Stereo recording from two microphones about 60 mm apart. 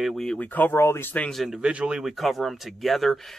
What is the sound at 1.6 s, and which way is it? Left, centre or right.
Speech, centre.